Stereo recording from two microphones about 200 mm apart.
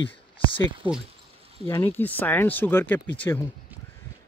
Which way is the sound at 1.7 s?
10° left (ahead or behind).